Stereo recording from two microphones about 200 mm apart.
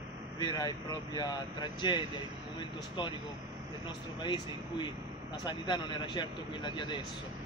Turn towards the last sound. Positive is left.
turn(degrees=25)  # may be behind; listen again after turning